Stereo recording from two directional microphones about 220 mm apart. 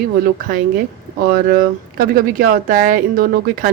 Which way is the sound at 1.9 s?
40° right (ahead or behind).